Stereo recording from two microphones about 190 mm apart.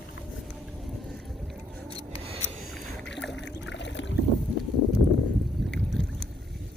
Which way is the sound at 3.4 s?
70° left (ahead or behind).